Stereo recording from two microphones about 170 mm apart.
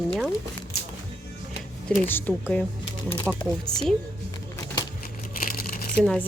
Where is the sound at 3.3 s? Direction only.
20° left (ahead or behind).